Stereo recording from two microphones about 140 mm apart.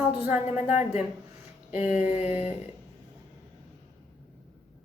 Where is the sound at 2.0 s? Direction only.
50° left (ahead or behind).